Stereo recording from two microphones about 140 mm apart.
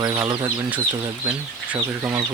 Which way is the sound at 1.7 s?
15° right (ahead or behind).